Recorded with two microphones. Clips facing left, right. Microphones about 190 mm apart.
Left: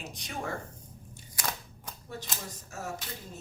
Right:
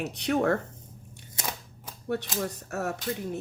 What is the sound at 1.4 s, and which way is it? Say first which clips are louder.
Scissors: right 1 dB; 25° right (ahead or behind).